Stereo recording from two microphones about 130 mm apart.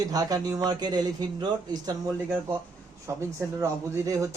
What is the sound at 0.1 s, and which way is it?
Speech, 30° right (ahead or behind).